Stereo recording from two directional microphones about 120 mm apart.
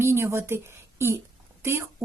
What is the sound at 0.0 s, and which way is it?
A woman's voice, 20° right (ahead or behind).